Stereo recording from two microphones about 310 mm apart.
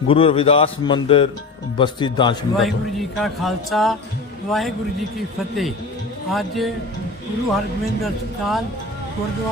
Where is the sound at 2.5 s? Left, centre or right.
Centre.